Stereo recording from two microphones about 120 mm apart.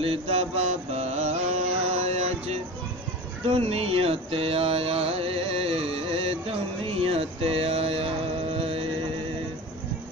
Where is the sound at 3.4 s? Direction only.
55° right (ahead or behind).